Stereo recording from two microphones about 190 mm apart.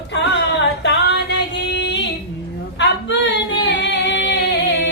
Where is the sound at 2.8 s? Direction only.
70° left (ahead or behind).